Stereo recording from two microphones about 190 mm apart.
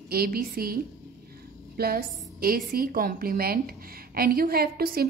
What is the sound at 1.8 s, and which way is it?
A woman's voice, 50° right (ahead or behind).